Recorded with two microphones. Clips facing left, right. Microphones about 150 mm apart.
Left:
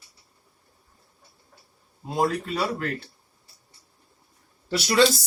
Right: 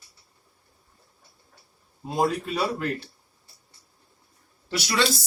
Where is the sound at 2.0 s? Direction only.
Centre (ahead or behind).